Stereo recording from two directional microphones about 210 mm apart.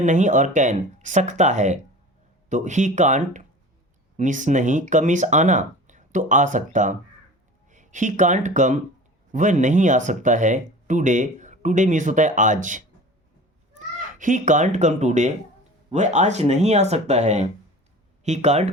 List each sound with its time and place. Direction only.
0.0 s speech: 35° right (ahead or behind)